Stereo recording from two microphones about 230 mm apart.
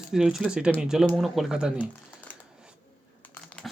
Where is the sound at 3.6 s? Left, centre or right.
Centre.